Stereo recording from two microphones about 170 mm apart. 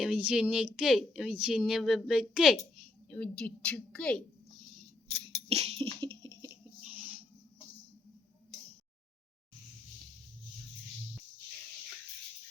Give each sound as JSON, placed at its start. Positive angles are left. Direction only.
{"t": 0.0, "sound": "speech", "side_deg": -5}
{"t": 5.5, "sound": "a sound", "side_deg": -35}
{"t": 6.8, "sound": "owl", "side_deg": -10}